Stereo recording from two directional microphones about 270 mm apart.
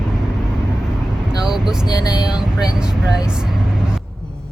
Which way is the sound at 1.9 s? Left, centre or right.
Centre.